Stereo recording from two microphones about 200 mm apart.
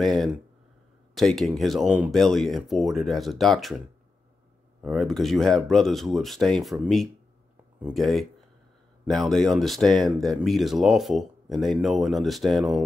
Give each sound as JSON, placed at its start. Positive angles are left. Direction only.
{"t": 0.0, "sound": "speech", "side_deg": 0}
{"t": 4.8, "sound": "speech", "side_deg": 0}